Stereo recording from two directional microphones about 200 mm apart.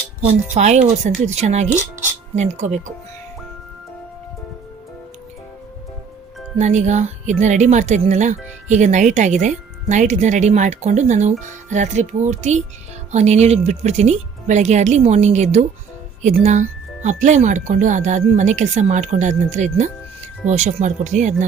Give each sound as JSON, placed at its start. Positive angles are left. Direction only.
{"t": 0.5, "sound": "a woman's voice", "side_deg": -35}
{"t": 6.6, "sound": "a woman's voice", "side_deg": -35}